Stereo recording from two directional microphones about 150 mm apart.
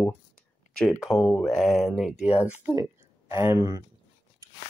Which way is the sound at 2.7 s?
20° right (ahead or behind).